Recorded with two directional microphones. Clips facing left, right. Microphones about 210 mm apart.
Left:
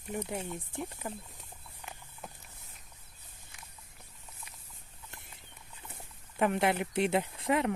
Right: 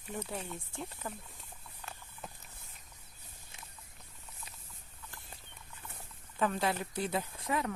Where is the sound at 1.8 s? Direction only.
15° left (ahead or behind).